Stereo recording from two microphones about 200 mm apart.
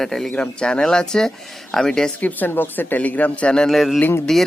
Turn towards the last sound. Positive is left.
turn(degrees=5)  # may be behind; listen again after turning